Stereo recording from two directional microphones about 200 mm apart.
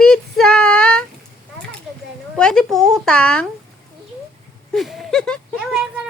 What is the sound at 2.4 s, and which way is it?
Speech, 5° left (ahead or behind).